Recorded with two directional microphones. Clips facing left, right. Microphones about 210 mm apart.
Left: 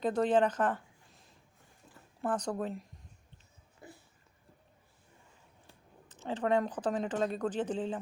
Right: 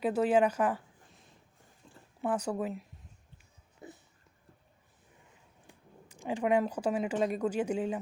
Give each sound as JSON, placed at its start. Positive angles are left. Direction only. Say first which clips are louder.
{"t": 0.0, "sound": "speech", "louder": "right 1 dB", "side_deg": -10}
{"t": 2.2, "sound": "speech", "louder": "right 2 dB", "side_deg": -5}
{"t": 3.8, "sound": "a sound", "louder": "right 3 dB", "side_deg": -20}
{"t": 5.6, "sound": "speech", "louder": "right 4 dB", "side_deg": -10}